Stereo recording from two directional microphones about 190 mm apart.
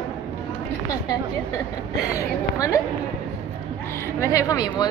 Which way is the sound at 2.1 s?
15° left (ahead or behind).